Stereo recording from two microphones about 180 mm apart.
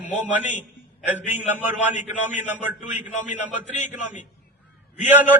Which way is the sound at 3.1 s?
45° left (ahead or behind).